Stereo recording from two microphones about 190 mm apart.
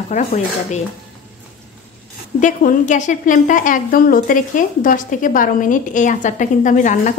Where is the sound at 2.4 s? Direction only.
45° left (ahead or behind).